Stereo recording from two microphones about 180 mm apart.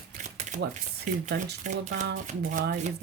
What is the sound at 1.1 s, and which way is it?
Speech, 40° right (ahead or behind).